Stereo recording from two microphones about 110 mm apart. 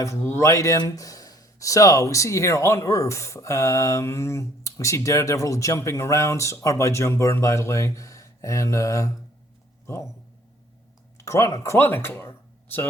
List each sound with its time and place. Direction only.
0.0 s speech: 25° left (ahead or behind)
11.2 s speech: 30° left (ahead or behind)